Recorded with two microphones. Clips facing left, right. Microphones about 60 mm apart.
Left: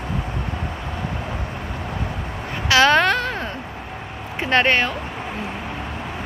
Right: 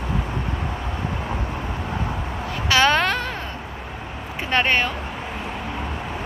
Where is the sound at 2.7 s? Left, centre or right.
Centre.